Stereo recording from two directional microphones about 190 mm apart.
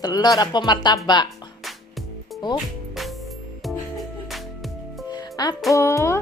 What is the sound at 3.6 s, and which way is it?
Music, centre (ahead or behind).